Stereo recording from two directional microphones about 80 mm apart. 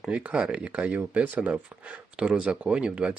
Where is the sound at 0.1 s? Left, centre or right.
Centre.